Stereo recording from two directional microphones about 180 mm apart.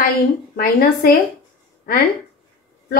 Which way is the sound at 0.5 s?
55° left (ahead or behind).